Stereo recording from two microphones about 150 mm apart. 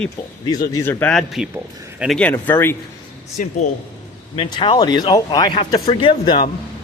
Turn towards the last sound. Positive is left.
turn(degrees=35)  # may be behind; listen again after turning